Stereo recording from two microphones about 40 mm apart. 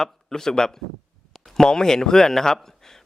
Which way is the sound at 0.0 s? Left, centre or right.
Centre.